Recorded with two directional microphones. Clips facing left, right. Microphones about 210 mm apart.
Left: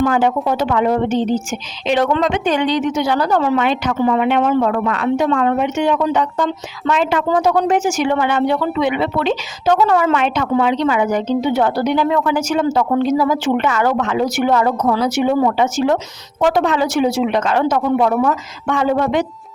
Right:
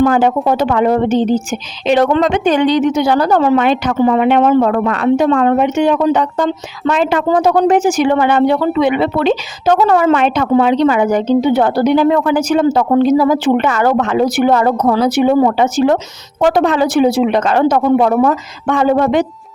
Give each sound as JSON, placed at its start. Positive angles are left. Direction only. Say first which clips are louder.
{"t": 0.0, "sound": "a woman's voice", "louder": "right 4 dB", "side_deg": -45}
{"t": 14.9, "sound": "speech", "louder": "right 5 dB", "side_deg": -35}